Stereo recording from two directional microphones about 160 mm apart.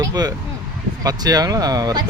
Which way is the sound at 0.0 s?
25° right (ahead or behind).